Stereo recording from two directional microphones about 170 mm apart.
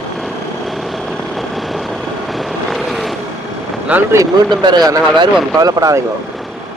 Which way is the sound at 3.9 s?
15° right (ahead or behind).